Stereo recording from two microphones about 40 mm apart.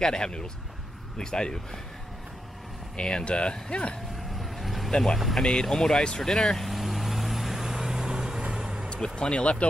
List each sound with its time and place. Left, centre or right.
0.0 s speech: centre
3.0 s speech: left
4.2 s vehicle: centre
4.9 s speech: centre
6.3 s speech: centre
6.7 s vehicle: centre
8.8 s speech: centre